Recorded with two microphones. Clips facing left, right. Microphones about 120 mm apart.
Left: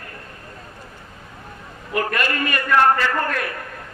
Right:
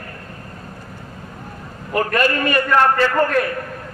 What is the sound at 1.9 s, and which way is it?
Speech, 35° right (ahead or behind).